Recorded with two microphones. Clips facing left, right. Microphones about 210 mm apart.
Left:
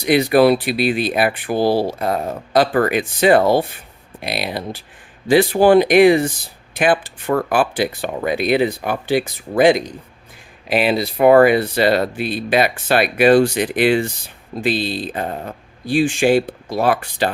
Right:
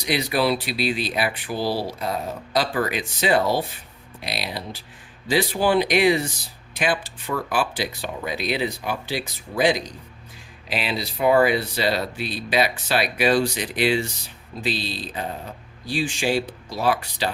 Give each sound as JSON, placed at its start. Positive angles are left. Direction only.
{"t": 0.0, "sound": "speech", "side_deg": 55}